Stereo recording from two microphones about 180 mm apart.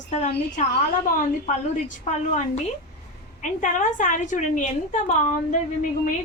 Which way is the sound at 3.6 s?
45° left (ahead or behind).